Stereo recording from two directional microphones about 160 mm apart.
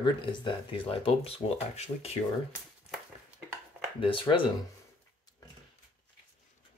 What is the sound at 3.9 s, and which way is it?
Speech, 35° left (ahead or behind).